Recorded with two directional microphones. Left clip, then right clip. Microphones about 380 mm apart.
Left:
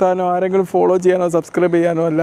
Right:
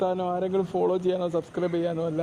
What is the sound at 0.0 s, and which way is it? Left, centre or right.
A man's voice, left.